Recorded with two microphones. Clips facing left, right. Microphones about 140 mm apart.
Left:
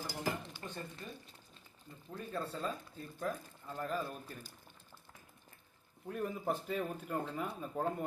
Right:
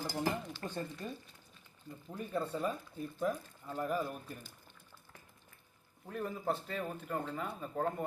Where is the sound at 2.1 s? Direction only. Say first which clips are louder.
Right 4 dB; 15° right (ahead or behind).